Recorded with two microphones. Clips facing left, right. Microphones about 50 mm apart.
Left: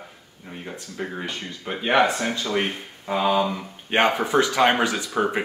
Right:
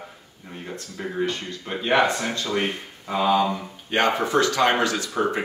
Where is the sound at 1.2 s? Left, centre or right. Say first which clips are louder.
Right 4 dB; centre.